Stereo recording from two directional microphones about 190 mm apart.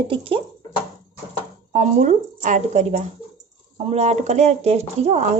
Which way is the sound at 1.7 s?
40° right (ahead or behind).